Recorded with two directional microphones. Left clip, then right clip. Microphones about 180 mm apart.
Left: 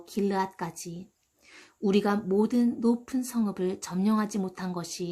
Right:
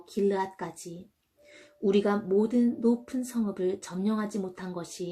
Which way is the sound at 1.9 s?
40° left (ahead or behind).